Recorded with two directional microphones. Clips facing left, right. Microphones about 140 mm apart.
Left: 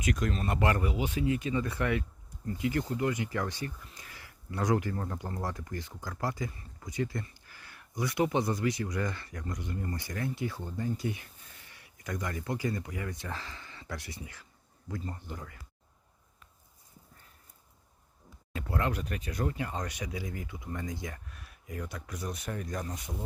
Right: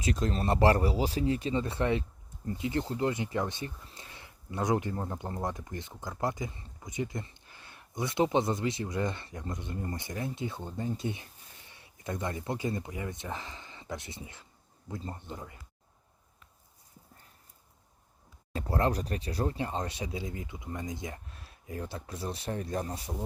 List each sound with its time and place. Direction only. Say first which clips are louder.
0.0 s speech: right 1 dB; 30° right (ahead or behind)
18.5 s speech: right 3 dB; 35° right (ahead or behind)